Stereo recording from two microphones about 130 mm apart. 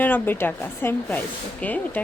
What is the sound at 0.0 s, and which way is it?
Speech, 15° left (ahead or behind).